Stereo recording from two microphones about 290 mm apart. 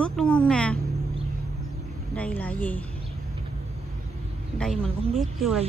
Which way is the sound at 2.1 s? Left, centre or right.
Centre.